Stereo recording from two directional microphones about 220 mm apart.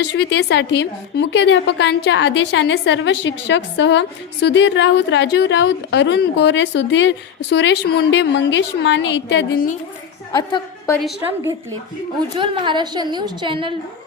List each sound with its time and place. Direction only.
0.0 s a woman's voice: 50° left (ahead or behind)
10.3 s a woman's voice: 20° left (ahead or behind)
12.4 s a woman's voice: 20° right (ahead or behind)